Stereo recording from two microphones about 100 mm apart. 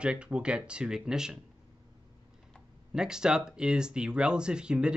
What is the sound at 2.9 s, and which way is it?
Speech, 5° right (ahead or behind).